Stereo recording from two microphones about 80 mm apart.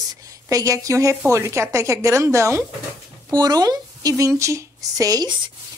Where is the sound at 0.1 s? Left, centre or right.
Right.